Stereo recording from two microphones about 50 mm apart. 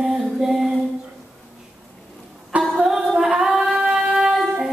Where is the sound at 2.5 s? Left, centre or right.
Right.